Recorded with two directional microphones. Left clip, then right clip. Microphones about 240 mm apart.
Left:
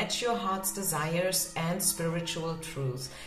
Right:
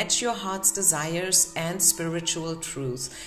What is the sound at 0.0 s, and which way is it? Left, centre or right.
A woman's voice, right.